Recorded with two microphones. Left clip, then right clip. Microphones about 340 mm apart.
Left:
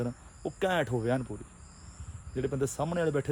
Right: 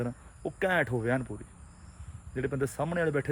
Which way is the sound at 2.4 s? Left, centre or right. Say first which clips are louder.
Even; centre.